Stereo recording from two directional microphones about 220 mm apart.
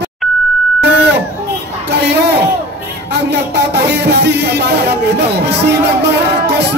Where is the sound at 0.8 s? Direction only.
50° right (ahead or behind).